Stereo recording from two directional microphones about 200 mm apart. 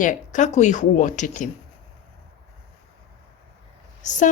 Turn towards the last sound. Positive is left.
turn(degrees=40)  # may be behind; listen again after turning